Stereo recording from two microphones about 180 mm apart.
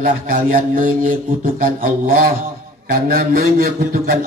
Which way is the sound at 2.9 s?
55° right (ahead or behind).